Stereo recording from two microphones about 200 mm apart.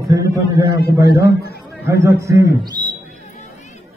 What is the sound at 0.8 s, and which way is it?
Speech, 50° left (ahead or behind).